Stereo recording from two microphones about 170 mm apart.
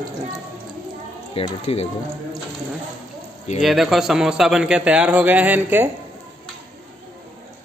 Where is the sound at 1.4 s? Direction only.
35° left (ahead or behind).